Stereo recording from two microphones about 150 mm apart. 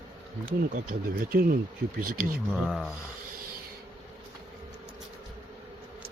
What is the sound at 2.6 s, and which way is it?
Speech, centre (ahead or behind).